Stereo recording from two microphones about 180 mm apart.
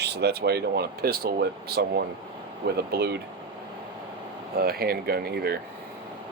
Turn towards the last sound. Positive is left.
turn(degrees=-60)  # may be behind; listen again after turning